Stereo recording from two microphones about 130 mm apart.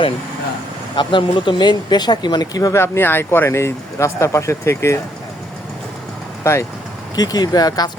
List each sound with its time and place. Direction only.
0.9 s speech: 40° left (ahead or behind); by 4.9 s 20° left (ahead or behind)
6.4 s speech: 20° left (ahead or behind)